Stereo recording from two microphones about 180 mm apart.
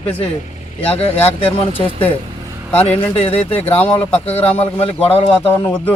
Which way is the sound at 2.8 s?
35° left (ahead or behind).